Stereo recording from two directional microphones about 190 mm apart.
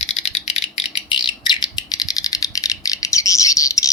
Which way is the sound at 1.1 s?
25° left (ahead or behind).